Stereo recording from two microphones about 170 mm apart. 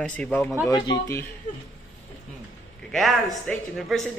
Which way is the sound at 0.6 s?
25° left (ahead or behind).